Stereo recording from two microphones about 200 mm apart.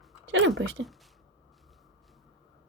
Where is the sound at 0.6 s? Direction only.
70° right (ahead or behind).